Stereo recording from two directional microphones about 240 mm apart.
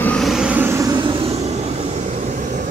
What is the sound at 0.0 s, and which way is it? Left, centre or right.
Vehicle, centre.